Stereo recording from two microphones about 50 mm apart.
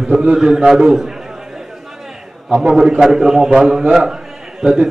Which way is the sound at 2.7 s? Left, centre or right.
Centre.